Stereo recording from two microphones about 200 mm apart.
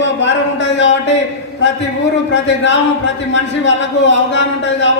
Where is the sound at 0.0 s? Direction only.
65° left (ahead or behind).